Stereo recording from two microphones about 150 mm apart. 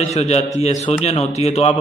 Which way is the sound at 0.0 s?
50° left (ahead or behind).